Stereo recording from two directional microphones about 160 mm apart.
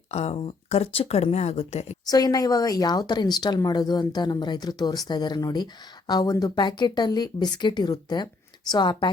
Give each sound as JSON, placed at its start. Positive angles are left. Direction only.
{"t": 0.1, "sound": "speech", "side_deg": 40}
{"t": 2.0, "sound": "speech", "side_deg": 25}